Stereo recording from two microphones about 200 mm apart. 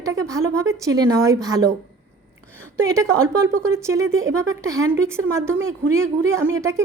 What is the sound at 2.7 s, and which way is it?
A woman's voice, 15° right (ahead or behind).